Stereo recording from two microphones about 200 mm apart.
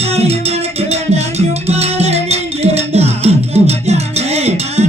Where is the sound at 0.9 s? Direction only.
30° right (ahead or behind).